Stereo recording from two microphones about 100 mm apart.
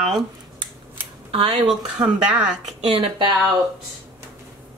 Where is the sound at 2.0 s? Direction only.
10° right (ahead or behind).